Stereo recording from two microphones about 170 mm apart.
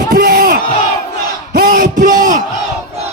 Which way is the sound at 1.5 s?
55° right (ahead or behind).